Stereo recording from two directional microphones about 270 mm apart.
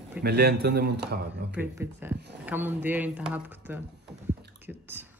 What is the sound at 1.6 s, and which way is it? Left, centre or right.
Speech, centre.